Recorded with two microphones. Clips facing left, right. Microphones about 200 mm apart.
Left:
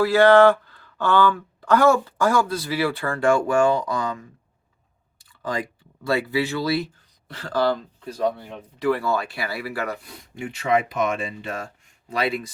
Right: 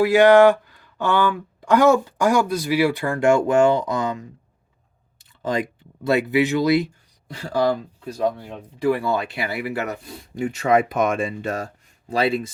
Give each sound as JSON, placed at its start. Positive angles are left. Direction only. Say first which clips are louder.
{"t": 0.0, "sound": "speech", "louder": "right 2 dB", "side_deg": -15}
{"t": 5.4, "sound": "speech", "louder": "right 4 dB", "side_deg": -20}
{"t": 10.3, "sound": "speech", "louder": "right 4 dB", "side_deg": -40}